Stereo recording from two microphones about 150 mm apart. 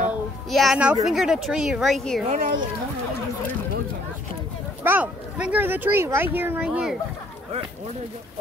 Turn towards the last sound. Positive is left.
turn(degrees=-10)  # may be behind; listen again after turning